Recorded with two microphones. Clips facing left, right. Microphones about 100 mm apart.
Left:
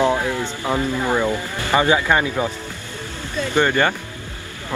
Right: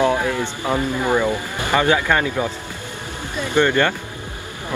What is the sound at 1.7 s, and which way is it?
Speech, 15° left (ahead or behind).